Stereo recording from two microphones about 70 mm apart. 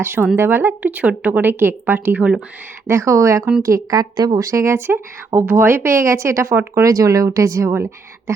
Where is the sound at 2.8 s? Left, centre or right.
Right.